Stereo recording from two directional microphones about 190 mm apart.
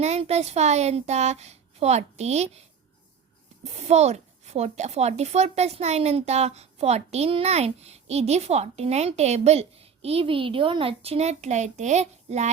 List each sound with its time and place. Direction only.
0.0 s a child's voice: 35° right (ahead or behind)